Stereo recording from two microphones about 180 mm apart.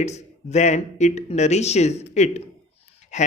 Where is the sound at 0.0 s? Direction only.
40° left (ahead or behind).